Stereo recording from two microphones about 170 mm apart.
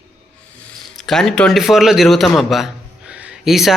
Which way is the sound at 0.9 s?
Centre (ahead or behind).